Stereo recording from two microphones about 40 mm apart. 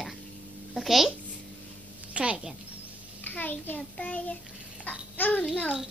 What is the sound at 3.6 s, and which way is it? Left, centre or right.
Speech, left.